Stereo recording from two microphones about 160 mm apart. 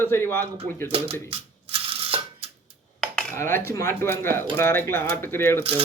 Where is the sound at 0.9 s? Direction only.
35° right (ahead or behind).